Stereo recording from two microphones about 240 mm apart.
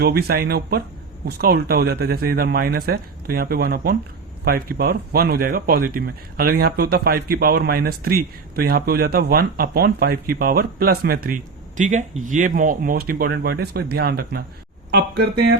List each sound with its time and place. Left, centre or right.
0.0 s speech: right